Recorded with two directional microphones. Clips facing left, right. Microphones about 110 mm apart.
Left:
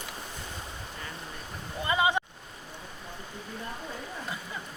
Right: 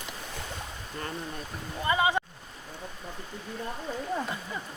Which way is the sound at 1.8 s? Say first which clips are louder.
Right 1 dB; 20° left (ahead or behind).